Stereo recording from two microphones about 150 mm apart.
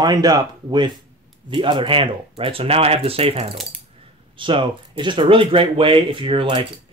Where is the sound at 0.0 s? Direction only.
25° right (ahead or behind).